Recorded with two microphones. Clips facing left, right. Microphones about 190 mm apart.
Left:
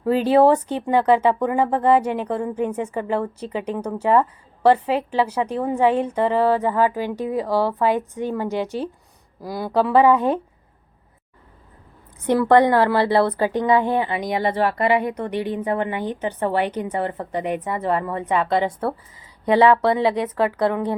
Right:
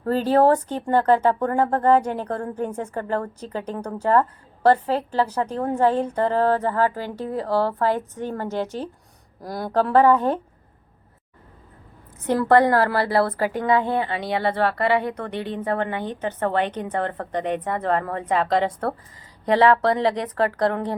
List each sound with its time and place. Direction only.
0.0 s a woman's voice: 10° left (ahead or behind)
12.2 s a woman's voice: 20° left (ahead or behind)
19.5 s a woman's voice: 10° left (ahead or behind)